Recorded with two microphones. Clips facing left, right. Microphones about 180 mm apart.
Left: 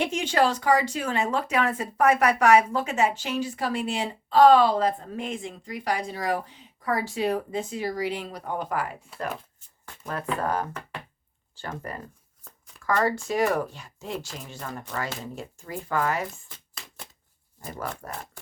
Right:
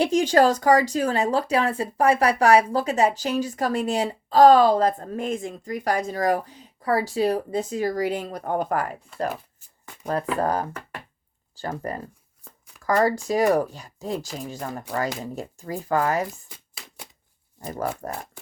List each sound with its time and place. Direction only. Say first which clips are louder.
0.0 s speech: right 6 dB; 40° right (ahead or behind)
9.3 s shuffling cards: right 1 dB; 10° right (ahead or behind)
10.4 s speech: right 3 dB; 40° right (ahead or behind)
17.7 s speech: right 6 dB; 40° right (ahead or behind)